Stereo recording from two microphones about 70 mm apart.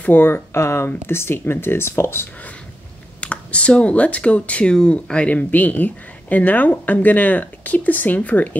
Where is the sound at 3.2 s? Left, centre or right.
Centre.